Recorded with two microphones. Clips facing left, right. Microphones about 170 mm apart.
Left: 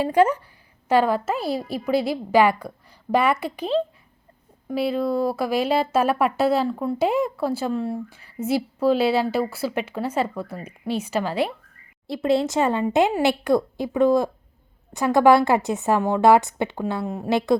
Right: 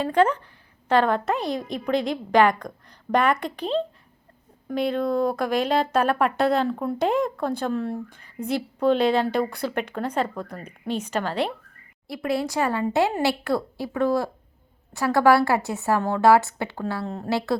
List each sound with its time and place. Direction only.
0.0 s speech: 10° left (ahead or behind)
12.0 s a woman's voice: 25° left (ahead or behind)